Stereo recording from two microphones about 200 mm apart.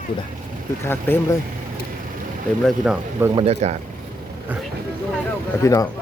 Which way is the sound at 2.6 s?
5° right (ahead or behind).